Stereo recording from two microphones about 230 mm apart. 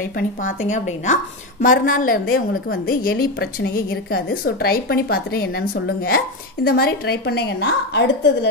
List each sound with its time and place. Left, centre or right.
0.1 s a woman's voice: left